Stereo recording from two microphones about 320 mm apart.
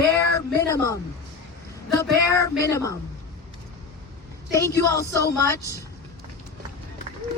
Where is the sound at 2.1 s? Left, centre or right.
Centre.